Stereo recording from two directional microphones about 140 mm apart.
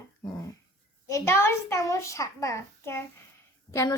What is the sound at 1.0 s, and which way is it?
Speech, 20° left (ahead or behind).